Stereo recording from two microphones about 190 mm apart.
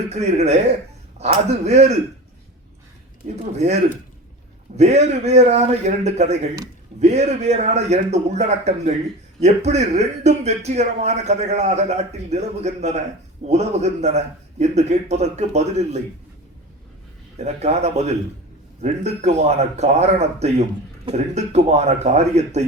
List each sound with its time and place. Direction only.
0.1 s speech: 35° right (ahead or behind)
3.2 s speech: 35° right (ahead or behind)
4.8 s speech: 35° right (ahead or behind)
17.3 s speech: 35° right (ahead or behind)